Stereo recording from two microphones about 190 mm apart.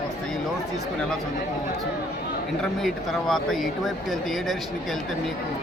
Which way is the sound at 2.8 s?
Centre (ahead or behind).